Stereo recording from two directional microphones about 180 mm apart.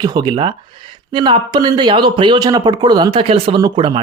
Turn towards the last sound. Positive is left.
turn(degrees=-25)  # may be behind; listen again after turning